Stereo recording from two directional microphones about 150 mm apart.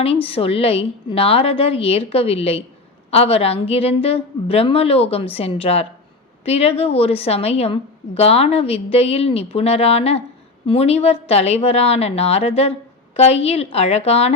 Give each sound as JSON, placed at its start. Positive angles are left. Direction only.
{"t": 0.0, "sound": "a woman's voice", "side_deg": 40}